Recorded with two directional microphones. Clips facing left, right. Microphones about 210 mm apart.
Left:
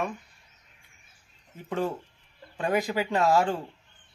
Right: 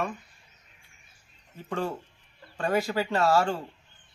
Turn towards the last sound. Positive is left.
turn(degrees=15)  # may be behind; listen again after turning